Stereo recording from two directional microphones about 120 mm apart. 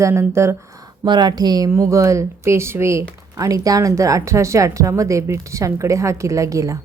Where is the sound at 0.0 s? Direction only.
25° right (ahead or behind).